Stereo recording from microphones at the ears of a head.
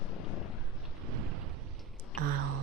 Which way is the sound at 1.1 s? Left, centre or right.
Right.